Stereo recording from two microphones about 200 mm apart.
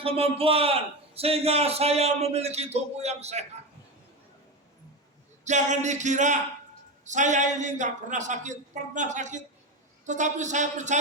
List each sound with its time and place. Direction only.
0.0 s a man's voice: 30° right (ahead or behind)
5.5 s a man's voice: 35° right (ahead or behind)